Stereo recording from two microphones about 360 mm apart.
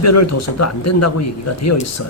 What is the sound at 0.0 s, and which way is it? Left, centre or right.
Speech, left.